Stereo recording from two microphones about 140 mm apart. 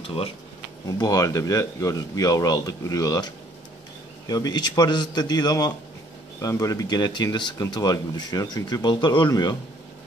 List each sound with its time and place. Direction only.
0.0 s speech: 40° left (ahead or behind)
0.8 s speech: 25° left (ahead or behind)